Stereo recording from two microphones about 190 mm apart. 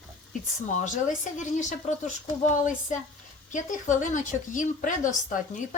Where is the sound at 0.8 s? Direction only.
40° left (ahead or behind).